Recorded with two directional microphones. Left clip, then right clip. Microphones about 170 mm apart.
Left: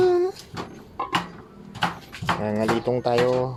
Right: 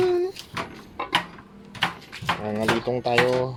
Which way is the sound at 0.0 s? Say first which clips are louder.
Left 3 dB; 20° left (ahead or behind).